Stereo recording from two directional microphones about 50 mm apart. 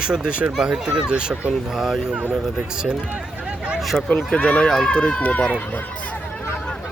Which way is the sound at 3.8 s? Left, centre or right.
Centre.